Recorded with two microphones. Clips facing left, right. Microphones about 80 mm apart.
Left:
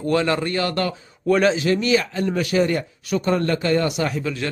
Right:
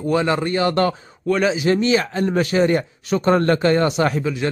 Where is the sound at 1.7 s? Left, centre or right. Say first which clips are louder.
Right 2 dB; right.